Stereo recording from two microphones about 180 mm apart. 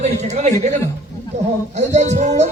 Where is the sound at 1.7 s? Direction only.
40° right (ahead or behind).